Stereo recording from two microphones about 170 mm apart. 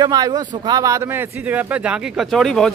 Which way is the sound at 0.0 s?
25° right (ahead or behind).